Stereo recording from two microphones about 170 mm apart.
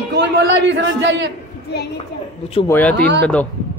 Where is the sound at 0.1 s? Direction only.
90° right.